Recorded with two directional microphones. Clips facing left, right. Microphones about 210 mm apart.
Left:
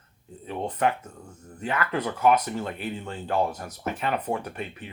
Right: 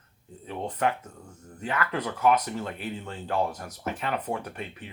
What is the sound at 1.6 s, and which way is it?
Speech, 20° left (ahead or behind).